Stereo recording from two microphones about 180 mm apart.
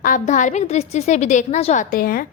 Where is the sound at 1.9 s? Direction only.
55° left (ahead or behind).